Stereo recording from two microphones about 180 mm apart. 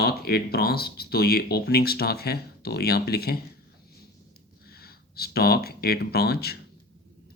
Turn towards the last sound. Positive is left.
turn(degrees=60)  # may be behind; listen again after turning